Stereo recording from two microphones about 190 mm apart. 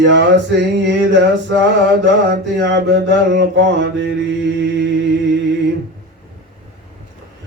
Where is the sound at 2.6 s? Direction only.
65° right (ahead or behind).